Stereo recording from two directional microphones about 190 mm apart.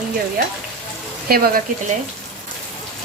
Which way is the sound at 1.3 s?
50° right (ahead or behind).